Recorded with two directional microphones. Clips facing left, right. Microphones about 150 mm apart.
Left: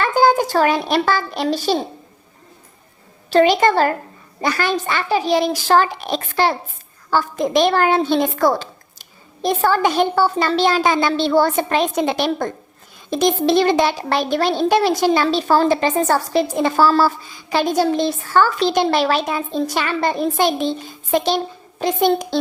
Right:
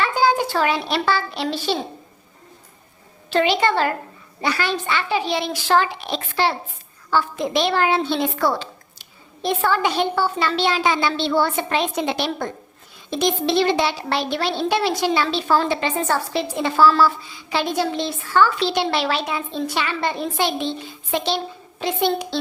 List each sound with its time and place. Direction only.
0.0 s a child's voice: 45° left (ahead or behind)
3.2 s a woman's voice: 40° left (ahead or behind)